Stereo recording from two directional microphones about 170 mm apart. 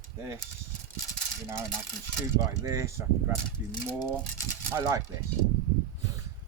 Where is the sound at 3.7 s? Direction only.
25° left (ahead or behind).